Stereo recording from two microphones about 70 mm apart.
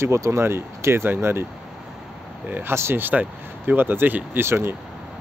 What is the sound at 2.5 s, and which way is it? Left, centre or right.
Speech, right.